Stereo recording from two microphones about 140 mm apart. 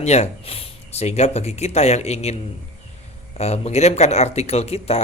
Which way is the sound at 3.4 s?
50° left (ahead or behind).